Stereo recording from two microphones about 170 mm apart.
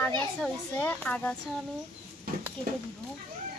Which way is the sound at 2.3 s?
60° right (ahead or behind).